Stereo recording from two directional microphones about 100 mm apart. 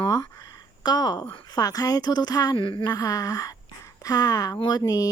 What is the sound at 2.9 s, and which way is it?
Speech, 35° left (ahead or behind).